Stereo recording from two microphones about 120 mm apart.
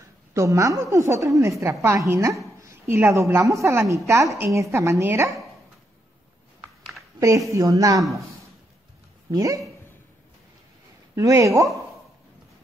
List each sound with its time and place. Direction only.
0.3 s a woman's voice: 25° right (ahead or behind)
7.2 s a woman's voice: 25° right (ahead or behind)
9.3 s a woman's voice: 30° right (ahead or behind)
11.1 s a woman's voice: 25° right (ahead or behind)